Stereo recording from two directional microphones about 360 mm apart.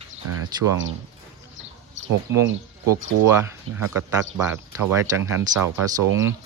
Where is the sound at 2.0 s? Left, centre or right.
Right.